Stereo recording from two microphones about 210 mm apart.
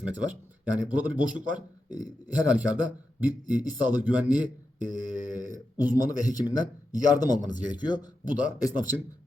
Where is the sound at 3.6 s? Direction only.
20° left (ahead or behind).